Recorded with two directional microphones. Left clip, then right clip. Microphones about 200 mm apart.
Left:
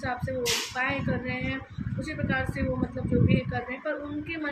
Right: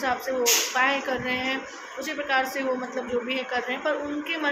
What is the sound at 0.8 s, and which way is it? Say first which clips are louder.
A woman's voice: right 6 dB; 10° left (ahead or behind).